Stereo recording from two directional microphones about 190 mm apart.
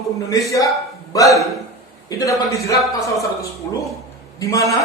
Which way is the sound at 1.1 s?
15° left (ahead or behind).